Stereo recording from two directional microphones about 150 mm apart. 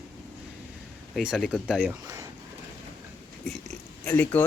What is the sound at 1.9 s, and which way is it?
Speech, 20° right (ahead or behind).